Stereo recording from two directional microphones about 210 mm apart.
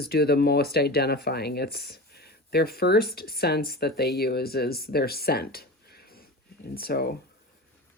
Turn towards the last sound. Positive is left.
turn(degrees=50)  # may be behind; listen again after turning